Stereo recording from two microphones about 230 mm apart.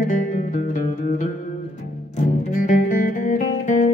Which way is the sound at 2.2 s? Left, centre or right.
Left.